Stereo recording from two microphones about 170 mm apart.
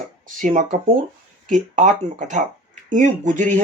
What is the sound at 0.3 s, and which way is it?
Speech, 50° right (ahead or behind).